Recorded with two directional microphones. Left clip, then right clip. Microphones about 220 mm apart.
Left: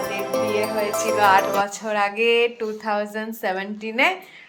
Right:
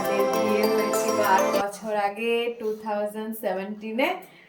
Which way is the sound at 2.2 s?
45° left (ahead or behind).